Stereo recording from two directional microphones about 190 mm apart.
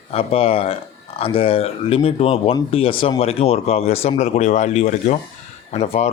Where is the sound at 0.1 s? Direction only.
30° left (ahead or behind).